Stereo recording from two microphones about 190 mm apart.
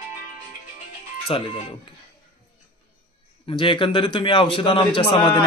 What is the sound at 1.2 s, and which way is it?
Speech, 30° left (ahead or behind).